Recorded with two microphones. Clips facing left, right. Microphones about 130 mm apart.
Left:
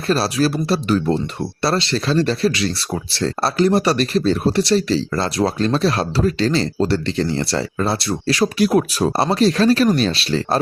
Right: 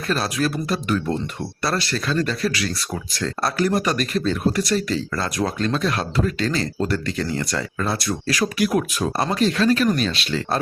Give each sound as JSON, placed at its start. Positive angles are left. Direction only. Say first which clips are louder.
{"t": 0.1, "sound": "speech", "louder": "left 5 dB", "side_deg": 30}